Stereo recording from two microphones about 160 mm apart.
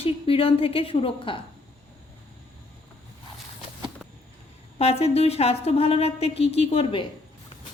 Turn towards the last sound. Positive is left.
turn(degrees=35)  # may be behind; listen again after turning